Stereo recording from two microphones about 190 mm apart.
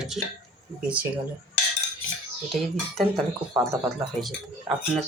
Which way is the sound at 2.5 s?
Centre (ahead or behind).